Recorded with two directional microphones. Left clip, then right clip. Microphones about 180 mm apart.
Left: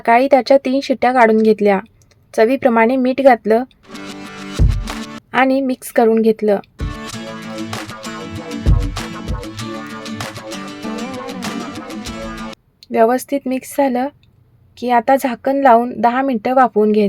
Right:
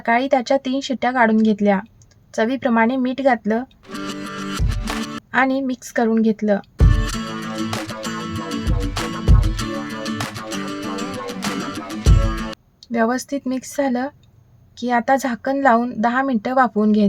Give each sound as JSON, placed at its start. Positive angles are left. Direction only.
{"t": 0.0, "sound": "speech", "side_deg": 40}
{"t": 3.8, "sound": "music", "side_deg": 0}
{"t": 5.3, "sound": "speech", "side_deg": 35}
{"t": 6.7, "sound": "music", "side_deg": 0}
{"t": 12.9, "sound": "a woman's voice", "side_deg": 30}